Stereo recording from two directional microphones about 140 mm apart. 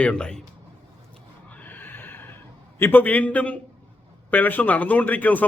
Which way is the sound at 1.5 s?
10° left (ahead or behind).